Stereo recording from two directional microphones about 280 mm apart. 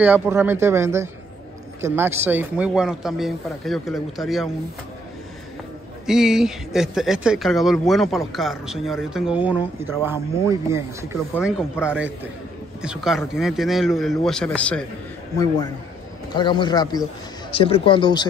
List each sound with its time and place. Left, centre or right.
0.0 s a man's voice: centre
6.0 s a man's voice: centre
15.3 s speech: centre